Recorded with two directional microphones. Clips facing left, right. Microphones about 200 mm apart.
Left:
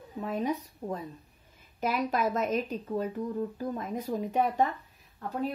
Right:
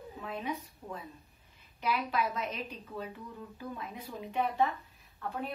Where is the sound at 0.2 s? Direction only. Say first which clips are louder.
Left 7 dB; 40° left (ahead or behind).